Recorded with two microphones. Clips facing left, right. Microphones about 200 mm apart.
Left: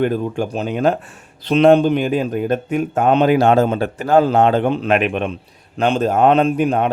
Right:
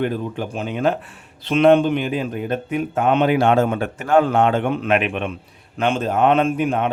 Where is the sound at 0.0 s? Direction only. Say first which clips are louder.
Left 4 dB; 45° left (ahead or behind).